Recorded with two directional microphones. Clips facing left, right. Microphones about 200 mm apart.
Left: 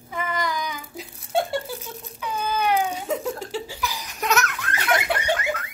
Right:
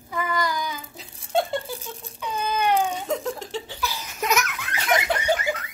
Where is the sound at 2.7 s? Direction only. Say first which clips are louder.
Right 1 dB; 5° left (ahead or behind).